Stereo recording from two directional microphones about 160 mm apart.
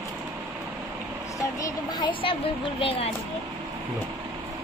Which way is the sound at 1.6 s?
30° left (ahead or behind).